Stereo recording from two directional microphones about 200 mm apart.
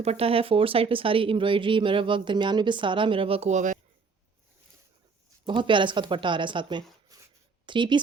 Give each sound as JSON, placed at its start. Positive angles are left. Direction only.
{"t": 0.0, "sound": "speech", "side_deg": -30}
{"t": 5.5, "sound": "speech", "side_deg": -25}